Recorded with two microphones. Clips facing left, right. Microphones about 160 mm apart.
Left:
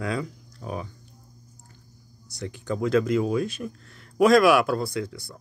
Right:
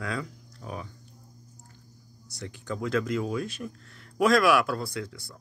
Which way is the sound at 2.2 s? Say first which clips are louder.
Left 5 dB; 15° left (ahead or behind).